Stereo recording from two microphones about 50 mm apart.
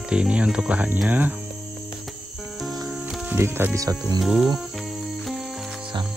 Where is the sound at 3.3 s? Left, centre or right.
Right.